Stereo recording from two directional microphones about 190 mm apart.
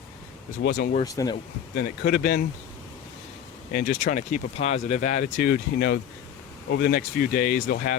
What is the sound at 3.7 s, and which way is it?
Speech, 45° left (ahead or behind).